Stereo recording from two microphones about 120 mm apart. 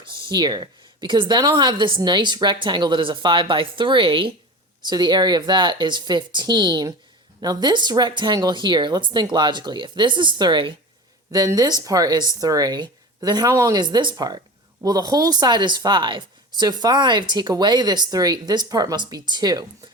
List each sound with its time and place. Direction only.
0.0 s speech: 40° right (ahead or behind)
11.3 s speech: 30° right (ahead or behind)